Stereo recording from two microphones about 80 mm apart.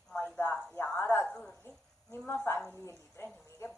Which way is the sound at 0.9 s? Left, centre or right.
Left.